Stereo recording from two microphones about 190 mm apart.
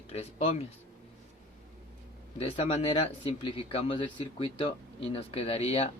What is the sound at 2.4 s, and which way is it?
Speech, 30° left (ahead or behind).